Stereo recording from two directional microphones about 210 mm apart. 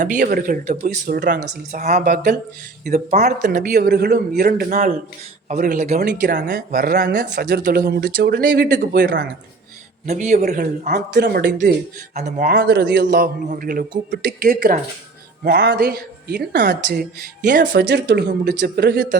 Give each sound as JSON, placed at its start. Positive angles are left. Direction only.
{"t": 0.2, "sound": "speech", "side_deg": -45}
{"t": 10.1, "sound": "speech", "side_deg": -30}
{"t": 10.3, "sound": "speech", "side_deg": -45}
{"t": 12.1, "sound": "speech", "side_deg": -35}
{"t": 17.6, "sound": "speech", "side_deg": -55}